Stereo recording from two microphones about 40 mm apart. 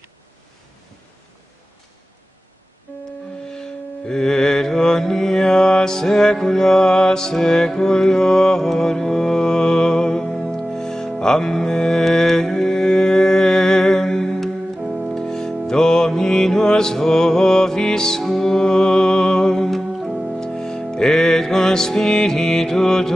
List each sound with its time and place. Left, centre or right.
3.4 s mantra: centre
10.7 s music: centre
14.8 s music: centre
15.1 s music: centre
20.0 s organ: centre
20.3 s music: centre